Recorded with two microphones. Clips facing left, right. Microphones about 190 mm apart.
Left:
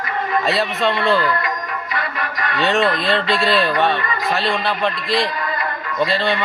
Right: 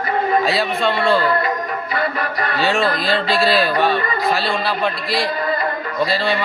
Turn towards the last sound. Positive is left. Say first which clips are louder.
# even
turn(degrees=0)  # may be behind; listen again after turning